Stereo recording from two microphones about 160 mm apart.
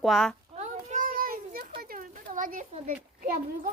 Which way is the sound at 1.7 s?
65° right (ahead or behind).